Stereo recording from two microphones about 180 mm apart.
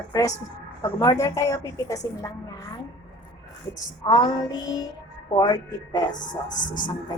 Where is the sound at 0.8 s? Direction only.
20° left (ahead or behind).